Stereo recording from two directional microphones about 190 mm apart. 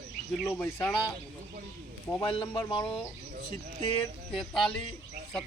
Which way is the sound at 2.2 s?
25° left (ahead or behind).